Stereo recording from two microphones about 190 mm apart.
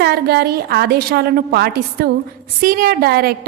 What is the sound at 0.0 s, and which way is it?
A woman's voice, 55° right (ahead or behind).